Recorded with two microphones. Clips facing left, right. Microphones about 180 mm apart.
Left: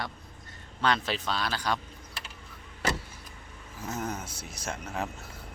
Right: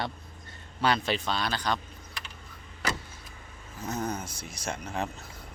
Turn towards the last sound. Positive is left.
turn(degrees=5)  # may be behind; listen again after turning